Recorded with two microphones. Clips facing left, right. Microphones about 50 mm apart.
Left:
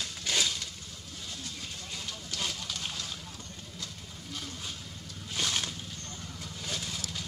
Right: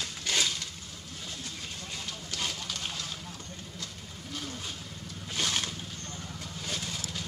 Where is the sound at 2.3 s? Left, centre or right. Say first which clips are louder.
Right 1 dB; centre.